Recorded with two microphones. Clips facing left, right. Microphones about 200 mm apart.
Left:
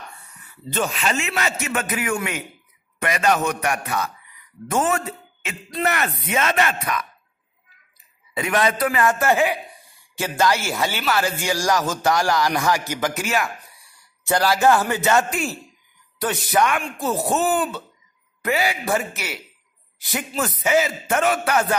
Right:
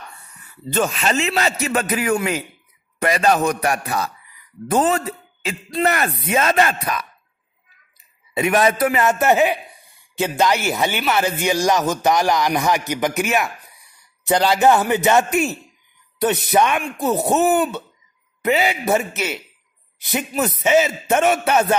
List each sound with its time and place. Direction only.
0.7 s a man's voice: 40° right (ahead or behind)
8.4 s speech: 25° right (ahead or behind)